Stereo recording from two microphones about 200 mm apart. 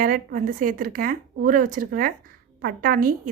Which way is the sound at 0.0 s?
45° right (ahead or behind).